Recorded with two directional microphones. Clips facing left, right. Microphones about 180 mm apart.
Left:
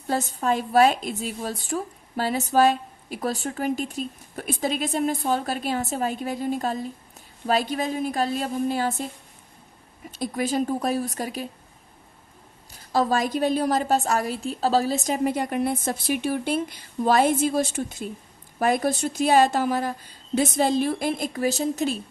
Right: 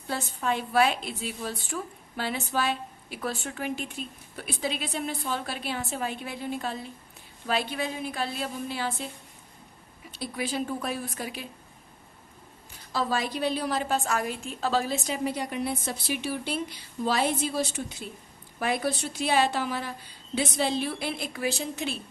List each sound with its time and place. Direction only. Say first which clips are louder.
0.1 s a woman's voice: left 5 dB; 40° left (ahead or behind)
10.1 s a woman's voice: left 6 dB; 45° left (ahead or behind)
12.7 s a woman's voice: left 6 dB; 45° left (ahead or behind)